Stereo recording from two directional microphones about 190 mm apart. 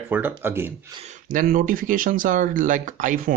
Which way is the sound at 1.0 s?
45° right (ahead or behind).